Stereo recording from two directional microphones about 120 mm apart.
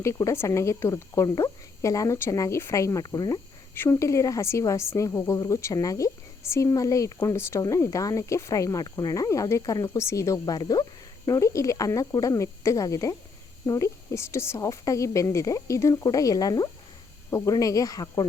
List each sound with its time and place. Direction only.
0.0 s speech: 25° left (ahead or behind)